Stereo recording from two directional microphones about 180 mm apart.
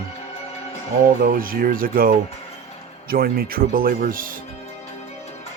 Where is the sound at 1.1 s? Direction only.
50° right (ahead or behind).